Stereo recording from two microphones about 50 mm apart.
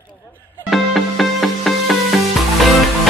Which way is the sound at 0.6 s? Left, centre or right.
Centre.